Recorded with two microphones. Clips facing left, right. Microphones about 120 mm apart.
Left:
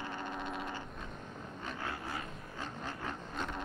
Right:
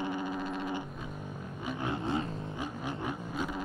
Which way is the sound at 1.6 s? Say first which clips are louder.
Right 8 dB; 20° right (ahead or behind).